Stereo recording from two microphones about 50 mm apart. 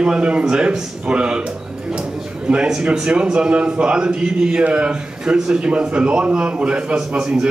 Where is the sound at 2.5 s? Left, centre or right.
Centre.